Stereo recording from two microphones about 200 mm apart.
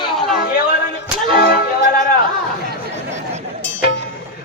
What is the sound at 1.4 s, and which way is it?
Music, 50° left (ahead or behind).